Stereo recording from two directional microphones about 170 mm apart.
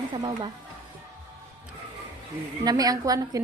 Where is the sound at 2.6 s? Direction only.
20° right (ahead or behind).